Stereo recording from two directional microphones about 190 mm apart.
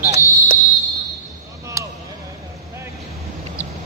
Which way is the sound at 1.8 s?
15° right (ahead or behind).